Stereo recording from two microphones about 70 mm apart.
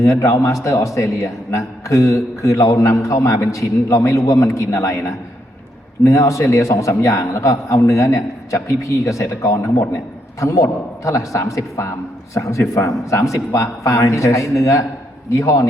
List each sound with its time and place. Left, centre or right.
0.0 s a man's voice: left